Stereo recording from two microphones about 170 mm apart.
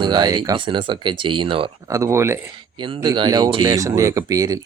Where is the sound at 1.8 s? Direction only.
20° right (ahead or behind).